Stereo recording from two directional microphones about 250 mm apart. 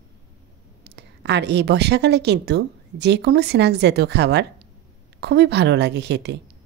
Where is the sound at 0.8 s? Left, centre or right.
Right.